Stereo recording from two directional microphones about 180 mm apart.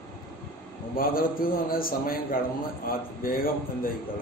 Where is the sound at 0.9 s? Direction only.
55° left (ahead or behind).